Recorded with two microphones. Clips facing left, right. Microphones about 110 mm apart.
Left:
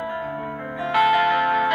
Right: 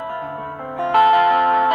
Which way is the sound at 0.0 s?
45° right (ahead or behind).